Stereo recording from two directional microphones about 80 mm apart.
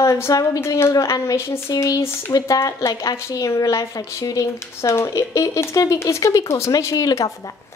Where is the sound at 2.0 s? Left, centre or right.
Left.